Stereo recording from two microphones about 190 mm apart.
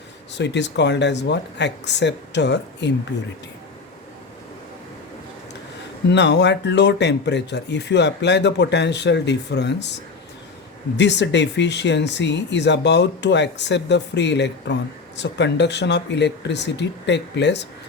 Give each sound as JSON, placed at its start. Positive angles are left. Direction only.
{"t": 0.3, "sound": "speech", "side_deg": 65}
{"t": 6.1, "sound": "speech", "side_deg": 65}
{"t": 10.9, "sound": "speech", "side_deg": 65}